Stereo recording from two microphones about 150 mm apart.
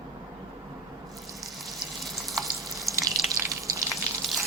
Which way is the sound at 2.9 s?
25° right (ahead or behind).